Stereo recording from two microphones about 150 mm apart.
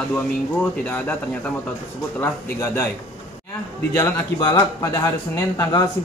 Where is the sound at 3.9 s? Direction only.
20° left (ahead or behind).